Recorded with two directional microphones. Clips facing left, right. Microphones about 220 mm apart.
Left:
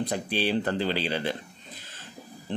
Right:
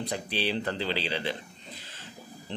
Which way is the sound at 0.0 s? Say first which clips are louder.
Left 3 dB; 50° left (ahead or behind).